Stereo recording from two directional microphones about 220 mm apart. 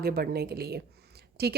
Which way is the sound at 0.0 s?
45° right (ahead or behind).